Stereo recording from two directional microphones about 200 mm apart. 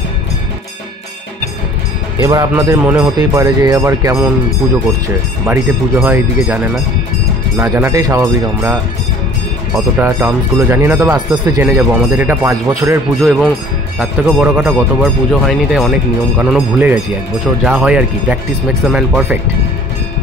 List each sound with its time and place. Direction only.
2.2 s speech: 15° right (ahead or behind)
5.5 s speech: 10° right (ahead or behind)
9.9 s speech: 10° right (ahead or behind)
13.2 s speech: centre (ahead or behind)